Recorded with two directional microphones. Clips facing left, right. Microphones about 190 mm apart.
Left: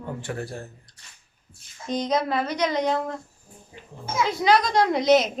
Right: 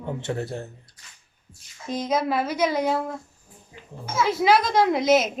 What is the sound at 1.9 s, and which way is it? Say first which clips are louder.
A woman's voice: even; 5° right (ahead or behind).